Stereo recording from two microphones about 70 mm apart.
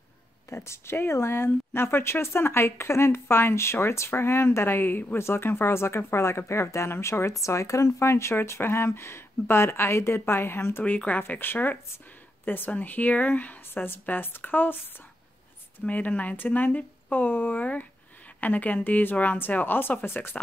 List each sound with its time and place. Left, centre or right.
0.6 s a woman's voice: left
10.8 s speech: centre
15.8 s speech: left